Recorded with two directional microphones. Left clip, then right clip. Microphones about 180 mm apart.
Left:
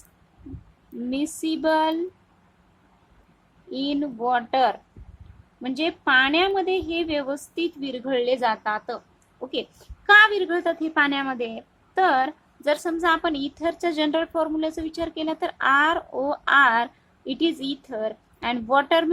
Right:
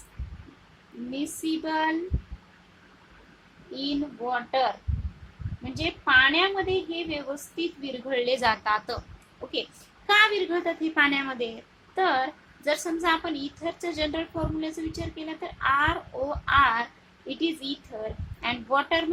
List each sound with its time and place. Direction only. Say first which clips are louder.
1.1 s speech: left 3 dB; 45° left (ahead or behind)
3.7 s speech: left 4 dB; 40° left (ahead or behind)
5.7 s speech: left 1 dB; 40° left (ahead or behind)
10.1 s speech: left 6 dB; 35° left (ahead or behind)